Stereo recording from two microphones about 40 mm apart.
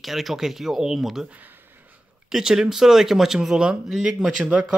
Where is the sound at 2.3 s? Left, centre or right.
Centre.